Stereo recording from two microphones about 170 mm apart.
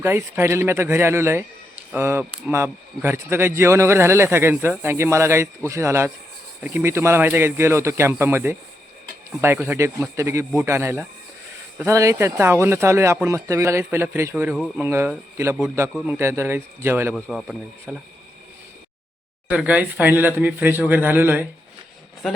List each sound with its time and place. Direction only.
0.0 s speech: 15° right (ahead or behind)
14.3 s speech: 5° right (ahead or behind)
17.2 s speech: 5° left (ahead or behind)
19.5 s speech: 10° right (ahead or behind)